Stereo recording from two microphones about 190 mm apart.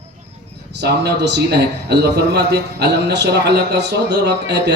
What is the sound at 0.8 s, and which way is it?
A man's voice, 65° right (ahead or behind).